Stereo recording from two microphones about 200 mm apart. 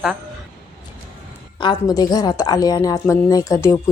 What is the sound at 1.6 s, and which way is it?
A woman's voice, 20° left (ahead or behind).